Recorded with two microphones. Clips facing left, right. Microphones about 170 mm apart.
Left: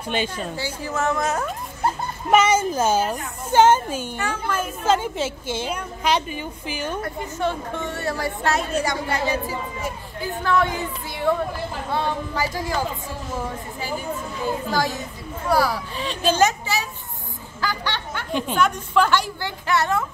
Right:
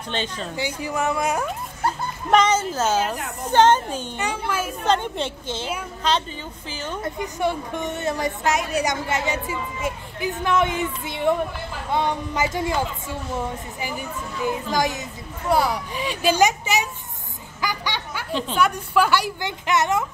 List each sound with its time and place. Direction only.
0.1 s a woman's voice: 10° left (ahead or behind)
0.6 s speech: 15° right (ahead or behind)
2.3 s a woman's voice: 10° left (ahead or behind)
4.2 s speech: 10° right (ahead or behind)
4.8 s a woman's voice: 5° left (ahead or behind)
7.0 s a woman's voice: 15° right (ahead or behind)
17.6 s a sound: 15° right (ahead or behind)
18.6 s speech: 10° right (ahead or behind)